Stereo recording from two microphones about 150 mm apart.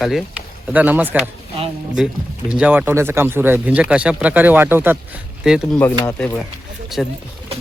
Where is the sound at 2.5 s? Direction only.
10° right (ahead or behind).